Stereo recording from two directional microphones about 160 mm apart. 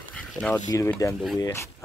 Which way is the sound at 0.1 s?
5° left (ahead or behind).